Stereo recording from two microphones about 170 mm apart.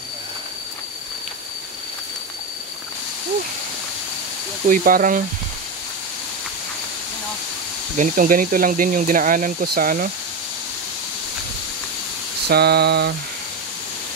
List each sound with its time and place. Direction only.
4.6 s speech: 55° right (ahead or behind)
8.0 s speech: 55° right (ahead or behind)
12.4 s a sound: 70° right (ahead or behind)